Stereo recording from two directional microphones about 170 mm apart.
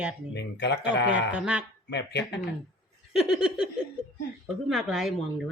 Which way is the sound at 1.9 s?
80° left.